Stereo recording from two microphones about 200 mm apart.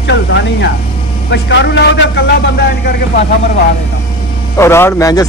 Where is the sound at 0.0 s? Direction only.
60° left (ahead or behind).